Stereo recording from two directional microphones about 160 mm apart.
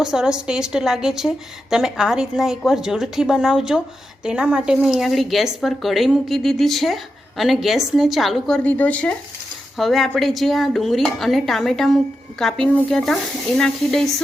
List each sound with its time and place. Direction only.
0.0 s speech: 5° right (ahead or behind)